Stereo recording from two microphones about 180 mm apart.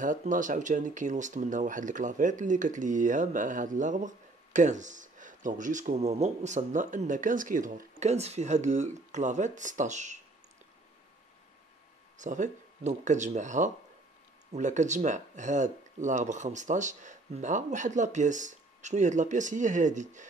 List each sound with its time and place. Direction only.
0.0 s speech: 45° right (ahead or behind)
12.2 s speech: 45° right (ahead or behind)